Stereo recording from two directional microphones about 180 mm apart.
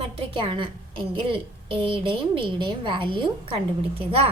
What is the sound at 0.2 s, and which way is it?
A woman's voice, 30° right (ahead or behind).